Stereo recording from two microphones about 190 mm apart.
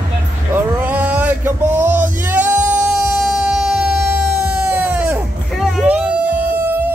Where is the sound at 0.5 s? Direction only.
10° right (ahead or behind).